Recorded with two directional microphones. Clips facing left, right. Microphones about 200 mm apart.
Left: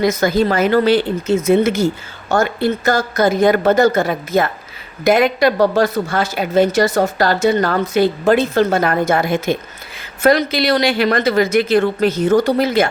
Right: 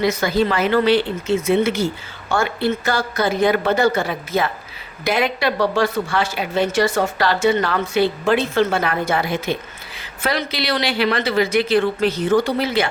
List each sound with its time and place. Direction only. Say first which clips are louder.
0.0 s speech: left 3 dB; 45° left (ahead or behind)